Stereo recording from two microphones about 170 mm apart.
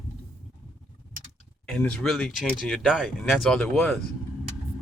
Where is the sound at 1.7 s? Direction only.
5° left (ahead or behind).